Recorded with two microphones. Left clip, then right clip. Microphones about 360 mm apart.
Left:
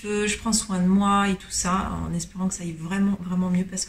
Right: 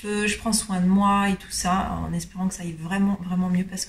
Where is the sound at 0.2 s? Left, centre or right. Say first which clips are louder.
Right 2 dB; centre.